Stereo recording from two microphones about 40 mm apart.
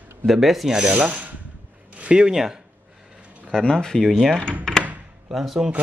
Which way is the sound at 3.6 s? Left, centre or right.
Centre.